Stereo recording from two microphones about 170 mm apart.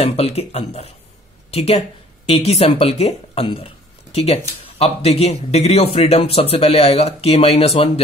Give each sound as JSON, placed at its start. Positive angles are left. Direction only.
{"t": 0.0, "sound": "a man's voice", "side_deg": 35}